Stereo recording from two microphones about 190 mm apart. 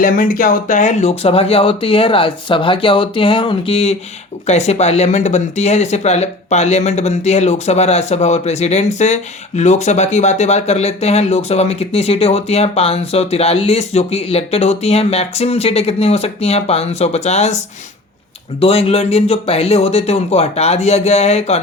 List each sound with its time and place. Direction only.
0.0 s speech: 45° left (ahead or behind)
18.6 s speech: 30° left (ahead or behind)